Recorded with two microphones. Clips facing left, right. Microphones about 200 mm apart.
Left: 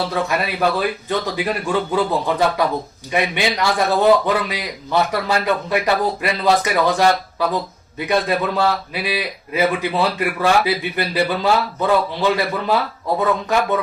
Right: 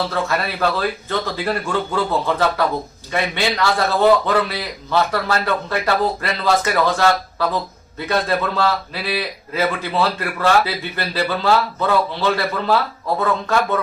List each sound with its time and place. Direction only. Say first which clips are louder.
0.1 s speech: left 1 dB; 15° left (ahead or behind)